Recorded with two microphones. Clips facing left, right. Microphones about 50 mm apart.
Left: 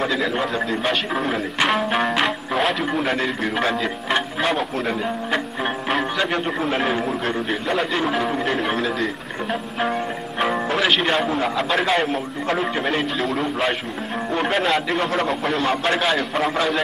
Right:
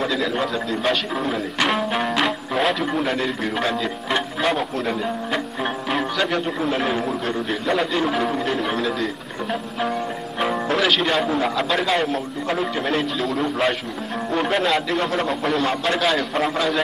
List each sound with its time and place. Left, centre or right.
0.0 s a man's voice: centre
0.5 s speech: left
1.2 s a man's voice: centre
4.7 s a man's voice: centre
5.9 s speech: centre
6.2 s a man's voice: centre
10.4 s music: centre
11.1 s a man's voice: centre